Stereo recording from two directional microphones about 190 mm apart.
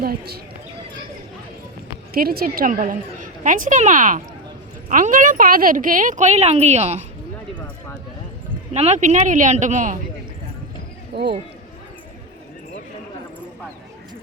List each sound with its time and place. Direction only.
2.1 s speech: 50° right (ahead or behind); by 7.0 s 35° right (ahead or behind)
8.7 s speech: 35° right (ahead or behind)
11.1 s speech: 60° right (ahead or behind)